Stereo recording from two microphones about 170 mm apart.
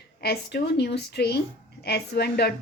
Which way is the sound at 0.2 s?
75° left (ahead or behind).